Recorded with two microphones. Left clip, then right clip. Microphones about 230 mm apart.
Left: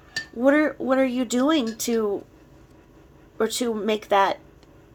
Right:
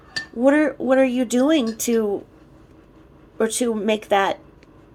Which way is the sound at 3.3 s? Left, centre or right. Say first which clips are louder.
Right 3 dB; centre.